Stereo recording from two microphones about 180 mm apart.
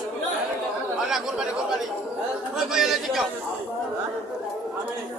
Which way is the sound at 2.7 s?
Centre (ahead or behind).